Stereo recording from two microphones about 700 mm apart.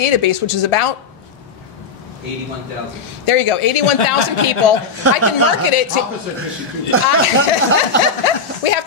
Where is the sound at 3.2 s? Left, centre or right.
Left.